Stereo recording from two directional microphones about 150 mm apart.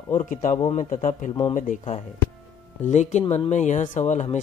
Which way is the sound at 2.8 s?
50° left (ahead or behind).